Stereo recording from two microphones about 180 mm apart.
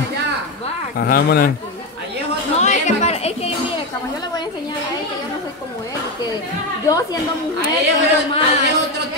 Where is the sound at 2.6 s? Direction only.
40° left (ahead or behind).